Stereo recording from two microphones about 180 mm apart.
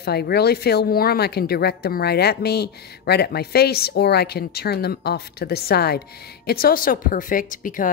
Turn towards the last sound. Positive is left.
turn(degrees=50)  # may be behind; listen again after turning